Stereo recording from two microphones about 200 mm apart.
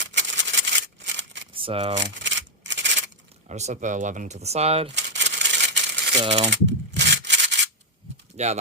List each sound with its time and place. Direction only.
0.0 s a sound: 65° right (ahead or behind)
1.5 s speech: 30° right (ahead or behind)
2.1 s rub: 65° right (ahead or behind)
3.5 s speech: 35° right (ahead or behind)
4.9 s rub: 60° right (ahead or behind)
6.2 s speech: 35° right (ahead or behind)
6.5 s rub: 65° right (ahead or behind)
8.4 s speech: 35° right (ahead or behind)